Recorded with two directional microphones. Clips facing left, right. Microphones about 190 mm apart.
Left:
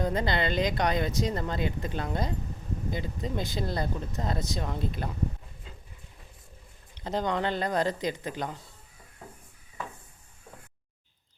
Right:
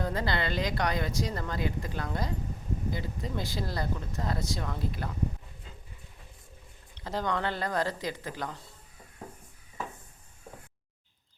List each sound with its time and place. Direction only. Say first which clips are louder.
0.0 s speech: left 3 dB; 20° left (ahead or behind)
7.0 s speech: left 2 dB; 20° left (ahead or behind)